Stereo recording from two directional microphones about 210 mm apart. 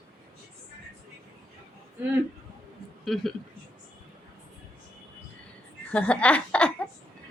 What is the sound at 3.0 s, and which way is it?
Speech, centre (ahead or behind).